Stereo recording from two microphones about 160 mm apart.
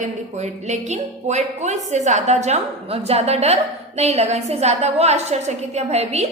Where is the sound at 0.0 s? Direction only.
45° right (ahead or behind).